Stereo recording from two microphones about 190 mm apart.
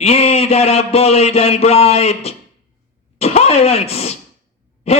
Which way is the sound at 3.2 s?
35° left (ahead or behind).